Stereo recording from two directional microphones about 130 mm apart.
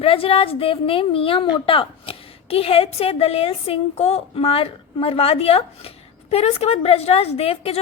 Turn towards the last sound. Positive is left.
turn(degrees=50)  # may be behind; listen again after turning